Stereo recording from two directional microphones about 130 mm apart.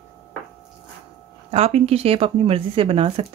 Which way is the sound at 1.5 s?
55° right (ahead or behind).